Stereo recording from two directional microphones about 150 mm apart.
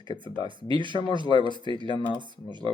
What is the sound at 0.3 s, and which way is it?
Speech, 30° right (ahead or behind).